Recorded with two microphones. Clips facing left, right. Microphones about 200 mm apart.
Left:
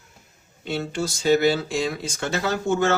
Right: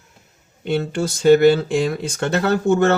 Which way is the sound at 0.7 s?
55° right (ahead or behind).